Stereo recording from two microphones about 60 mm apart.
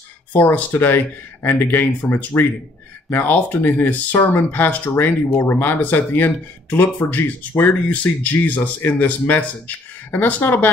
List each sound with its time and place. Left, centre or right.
0.3 s speech: left
4.9 s speech: left